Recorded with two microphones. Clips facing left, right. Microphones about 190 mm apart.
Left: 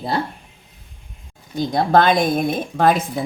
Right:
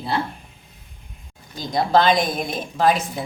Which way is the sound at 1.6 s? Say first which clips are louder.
Left 3 dB; 55° left (ahead or behind).